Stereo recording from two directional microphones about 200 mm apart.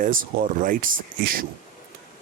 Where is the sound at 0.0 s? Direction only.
40° right (ahead or behind).